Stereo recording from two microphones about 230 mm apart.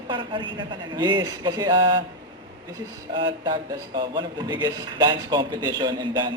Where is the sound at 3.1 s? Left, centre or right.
Centre.